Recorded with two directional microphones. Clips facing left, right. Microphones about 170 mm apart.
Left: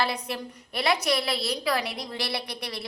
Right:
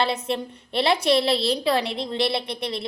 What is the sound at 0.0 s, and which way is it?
A woman's voice, 25° right (ahead or behind).